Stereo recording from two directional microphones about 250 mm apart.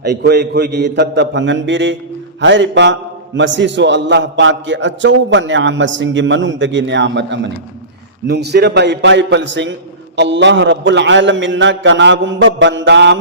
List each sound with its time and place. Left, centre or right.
0.0 s a man's voice: right